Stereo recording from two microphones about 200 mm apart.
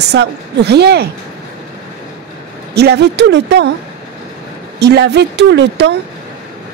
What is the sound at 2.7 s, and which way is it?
Speech, 55° right (ahead or behind).